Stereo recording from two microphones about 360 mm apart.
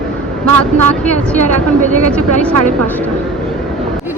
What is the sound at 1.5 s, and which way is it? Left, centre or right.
Speech, right.